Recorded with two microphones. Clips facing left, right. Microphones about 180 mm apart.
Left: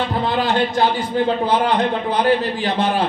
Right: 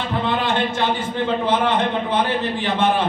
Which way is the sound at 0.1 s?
35° left (ahead or behind).